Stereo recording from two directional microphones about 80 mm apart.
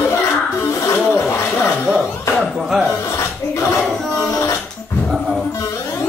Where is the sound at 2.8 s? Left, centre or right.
Left.